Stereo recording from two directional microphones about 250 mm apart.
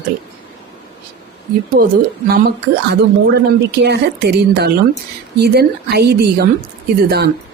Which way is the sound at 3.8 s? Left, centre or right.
Right.